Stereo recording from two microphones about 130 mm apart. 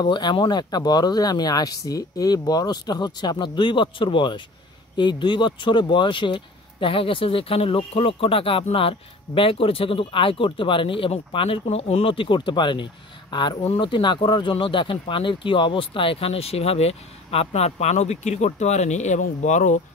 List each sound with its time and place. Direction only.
0.0 s speech: 35° left (ahead or behind); by 19.8 s 70° left (ahead or behind)